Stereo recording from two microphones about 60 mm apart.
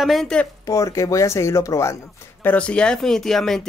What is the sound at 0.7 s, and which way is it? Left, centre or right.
Speech, left.